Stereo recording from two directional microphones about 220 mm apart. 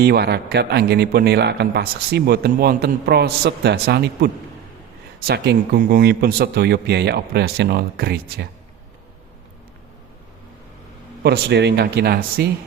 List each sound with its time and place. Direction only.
0.0 s a man's voice: 45° right (ahead or behind)
11.2 s a man's voice: 50° right (ahead or behind)